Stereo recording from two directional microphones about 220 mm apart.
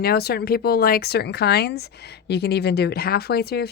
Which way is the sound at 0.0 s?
45° left (ahead or behind).